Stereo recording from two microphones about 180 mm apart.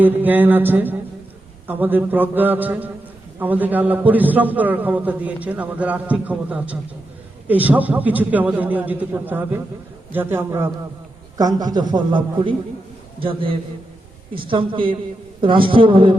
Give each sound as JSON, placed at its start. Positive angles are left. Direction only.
{"t": 0.0, "sound": "a man's voice", "side_deg": -10}